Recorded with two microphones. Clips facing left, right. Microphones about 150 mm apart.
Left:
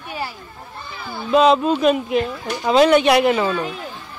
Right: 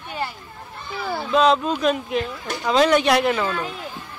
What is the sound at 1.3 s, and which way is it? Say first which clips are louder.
A woman's voice: left 4 dB; 5° left (ahead or behind).